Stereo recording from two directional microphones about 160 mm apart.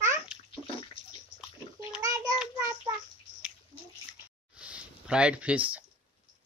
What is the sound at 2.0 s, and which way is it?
Child singing, 20° right (ahead or behind).